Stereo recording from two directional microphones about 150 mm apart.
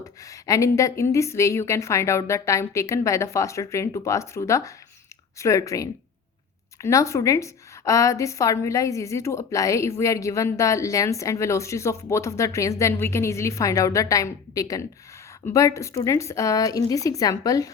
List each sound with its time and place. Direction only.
0.0 s a woman's voice: 20° left (ahead or behind)